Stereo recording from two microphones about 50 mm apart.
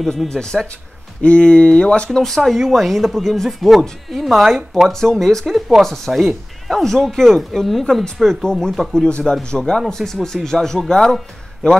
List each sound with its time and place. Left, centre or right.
0.3 s speech: centre
2.0 s speech: centre
5.9 s speech: centre
7.8 s speech: centre